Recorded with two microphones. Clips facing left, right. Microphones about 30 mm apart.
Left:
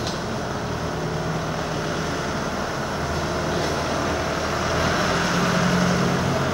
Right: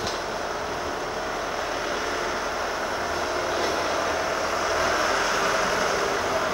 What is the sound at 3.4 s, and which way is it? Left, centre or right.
Vehicle, centre.